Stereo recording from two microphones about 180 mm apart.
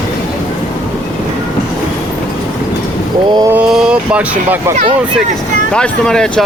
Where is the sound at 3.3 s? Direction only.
20° right (ahead or behind).